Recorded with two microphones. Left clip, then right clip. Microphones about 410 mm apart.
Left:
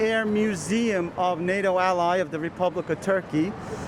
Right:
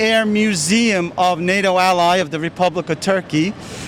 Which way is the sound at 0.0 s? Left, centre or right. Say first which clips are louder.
Right 8 dB; right.